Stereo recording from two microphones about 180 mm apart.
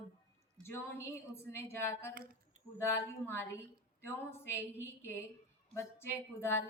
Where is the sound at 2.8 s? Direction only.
10° left (ahead or behind).